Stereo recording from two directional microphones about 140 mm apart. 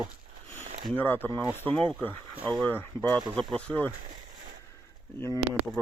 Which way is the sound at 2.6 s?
15° left (ahead or behind).